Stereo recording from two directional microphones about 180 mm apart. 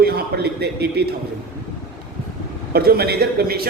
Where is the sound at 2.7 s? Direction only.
60° right (ahead or behind).